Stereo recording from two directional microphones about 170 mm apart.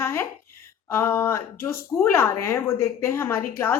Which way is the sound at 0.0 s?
15° left (ahead or behind).